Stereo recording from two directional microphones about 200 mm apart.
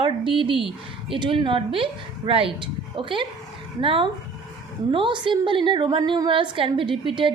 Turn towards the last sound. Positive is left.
turn(degrees=-25)  # may be behind; listen again after turning